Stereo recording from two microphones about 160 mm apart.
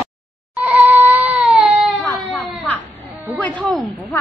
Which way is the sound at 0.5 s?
10° right (ahead or behind).